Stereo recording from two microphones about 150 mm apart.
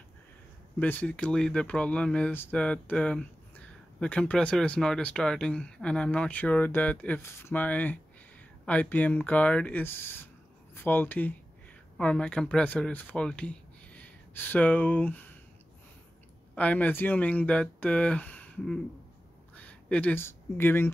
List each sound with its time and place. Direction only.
0.7 s speech: 10° left (ahead or behind)
16.5 s speech: 10° left (ahead or behind)